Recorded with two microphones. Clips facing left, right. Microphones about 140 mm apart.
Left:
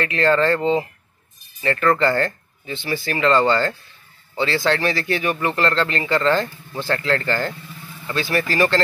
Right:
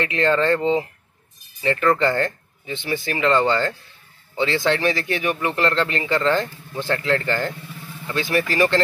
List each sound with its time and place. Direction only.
0.0 s speech: 15° right (ahead or behind)